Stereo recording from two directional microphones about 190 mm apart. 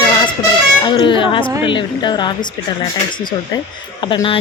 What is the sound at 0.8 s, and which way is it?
Speech, 25° left (ahead or behind).